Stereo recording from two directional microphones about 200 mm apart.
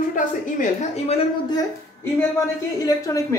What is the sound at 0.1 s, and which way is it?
A woman's voice, 35° left (ahead or behind).